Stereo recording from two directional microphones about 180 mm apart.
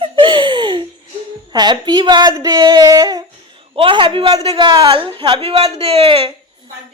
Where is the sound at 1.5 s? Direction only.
25° right (ahead or behind).